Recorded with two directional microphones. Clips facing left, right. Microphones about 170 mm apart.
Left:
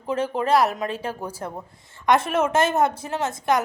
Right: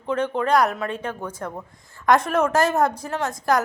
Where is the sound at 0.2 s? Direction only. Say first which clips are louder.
Even; 5° left (ahead or behind).